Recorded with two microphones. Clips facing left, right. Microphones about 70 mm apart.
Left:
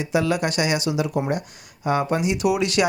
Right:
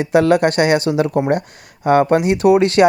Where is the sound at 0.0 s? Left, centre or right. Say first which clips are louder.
Right 9 dB; right.